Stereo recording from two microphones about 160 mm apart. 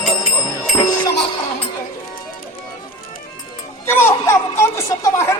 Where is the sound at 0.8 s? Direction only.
25° left (ahead or behind).